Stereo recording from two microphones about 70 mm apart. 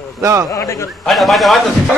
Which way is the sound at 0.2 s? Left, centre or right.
Right.